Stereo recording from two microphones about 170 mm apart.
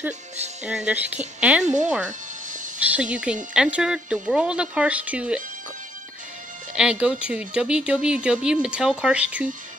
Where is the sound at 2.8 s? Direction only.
5° right (ahead or behind).